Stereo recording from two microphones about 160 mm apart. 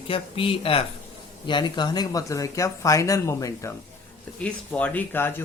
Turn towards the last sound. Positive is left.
turn(degrees=15)  # may be behind; listen again after turning